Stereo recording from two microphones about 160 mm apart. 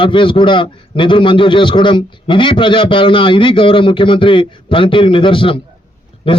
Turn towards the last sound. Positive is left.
turn(degrees=35)  # may be behind; listen again after turning